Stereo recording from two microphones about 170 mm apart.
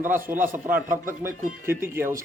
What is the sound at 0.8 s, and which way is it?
Speech, 55° right (ahead or behind).